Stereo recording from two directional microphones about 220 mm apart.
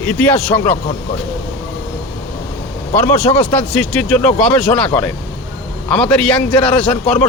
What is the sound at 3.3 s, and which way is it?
A man's voice, 5° left (ahead or behind).